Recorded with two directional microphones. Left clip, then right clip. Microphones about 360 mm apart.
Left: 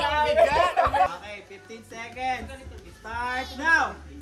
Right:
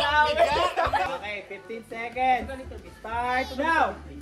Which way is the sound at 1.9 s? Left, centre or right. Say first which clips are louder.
Right 6 dB; centre.